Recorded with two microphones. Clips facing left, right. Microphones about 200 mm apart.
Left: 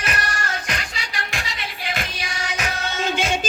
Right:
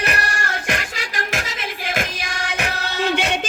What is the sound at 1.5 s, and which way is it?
Music, 50° right (ahead or behind).